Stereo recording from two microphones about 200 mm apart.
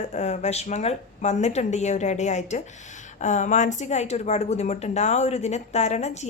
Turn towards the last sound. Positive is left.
turn(degrees=35)  # may be behind; listen again after turning